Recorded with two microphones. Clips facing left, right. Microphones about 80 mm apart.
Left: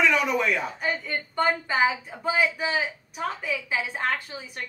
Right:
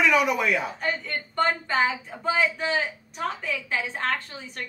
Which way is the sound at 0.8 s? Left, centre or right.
Centre.